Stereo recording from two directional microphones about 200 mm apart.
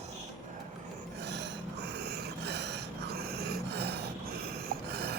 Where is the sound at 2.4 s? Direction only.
60° right (ahead or behind).